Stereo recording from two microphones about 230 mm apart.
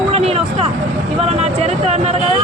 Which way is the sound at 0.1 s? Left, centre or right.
Right.